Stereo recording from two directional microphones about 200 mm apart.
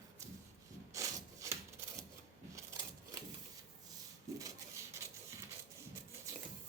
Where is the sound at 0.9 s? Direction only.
15° right (ahead or behind).